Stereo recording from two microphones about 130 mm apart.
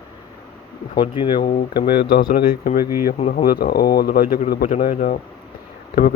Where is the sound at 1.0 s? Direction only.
40° left (ahead or behind).